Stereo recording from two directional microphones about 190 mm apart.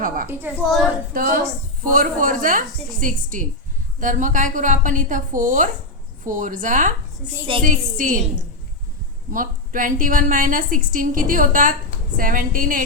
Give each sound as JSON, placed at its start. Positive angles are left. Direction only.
{"t": 0.3, "sound": "a woman's voice", "side_deg": -10}
{"t": 1.1, "sound": "a woman's voice", "side_deg": -50}
{"t": 9.3, "sound": "a woman's voice", "side_deg": -45}